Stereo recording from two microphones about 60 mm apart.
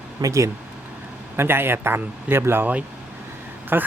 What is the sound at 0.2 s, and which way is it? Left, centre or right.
Speech, right.